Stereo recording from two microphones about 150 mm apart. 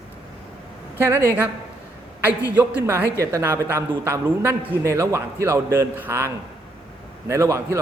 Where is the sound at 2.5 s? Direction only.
10° right (ahead or behind).